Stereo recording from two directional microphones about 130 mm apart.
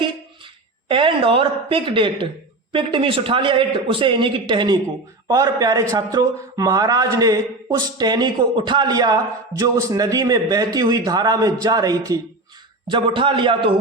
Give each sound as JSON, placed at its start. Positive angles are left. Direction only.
{"t": 0.9, "sound": "a woman's voice", "side_deg": -40}
{"t": 12.9, "sound": "a man's voice", "side_deg": -40}